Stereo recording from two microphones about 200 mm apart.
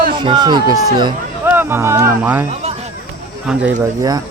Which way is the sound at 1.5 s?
10° right (ahead or behind).